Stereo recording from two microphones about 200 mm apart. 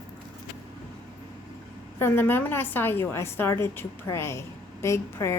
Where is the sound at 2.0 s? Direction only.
10° left (ahead or behind).